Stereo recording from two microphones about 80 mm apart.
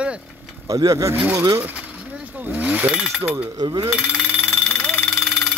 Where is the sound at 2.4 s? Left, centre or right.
Right.